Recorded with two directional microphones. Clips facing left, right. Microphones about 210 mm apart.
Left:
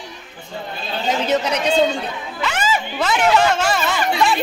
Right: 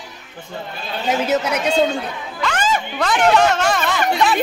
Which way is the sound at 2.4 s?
5° left (ahead or behind).